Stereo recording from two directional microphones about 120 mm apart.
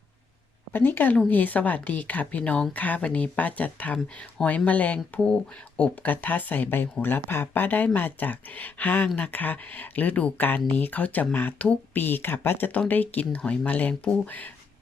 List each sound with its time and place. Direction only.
0.7 s speech: 15° left (ahead or behind)